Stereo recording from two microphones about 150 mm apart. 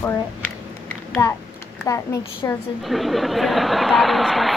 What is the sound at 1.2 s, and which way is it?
A woman's voice, 15° left (ahead or behind).